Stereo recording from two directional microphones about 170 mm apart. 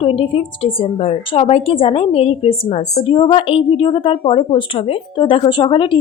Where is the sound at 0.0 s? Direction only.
35° left (ahead or behind).